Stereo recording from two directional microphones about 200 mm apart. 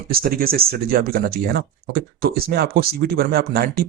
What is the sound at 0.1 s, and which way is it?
Speech, 50° right (ahead or behind).